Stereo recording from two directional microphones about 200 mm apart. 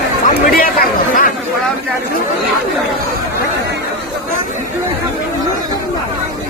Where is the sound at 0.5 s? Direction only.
45° left (ahead or behind).